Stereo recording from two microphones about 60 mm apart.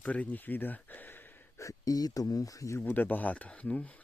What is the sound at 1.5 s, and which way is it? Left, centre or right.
Speech, left.